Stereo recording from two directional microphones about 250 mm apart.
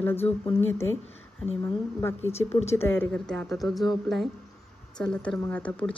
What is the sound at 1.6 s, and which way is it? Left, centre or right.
Speech, centre.